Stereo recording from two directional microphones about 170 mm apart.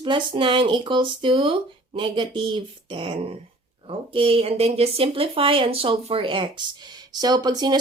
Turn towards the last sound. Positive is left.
turn(degrees=-25)  # may be behind; listen again after turning